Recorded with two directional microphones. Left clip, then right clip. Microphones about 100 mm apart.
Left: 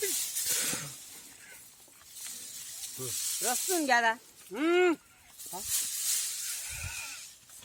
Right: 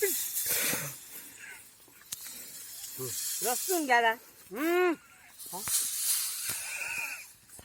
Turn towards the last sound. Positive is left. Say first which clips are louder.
# right 6 dB
turn(degrees=-5)  # may be behind; listen again after turning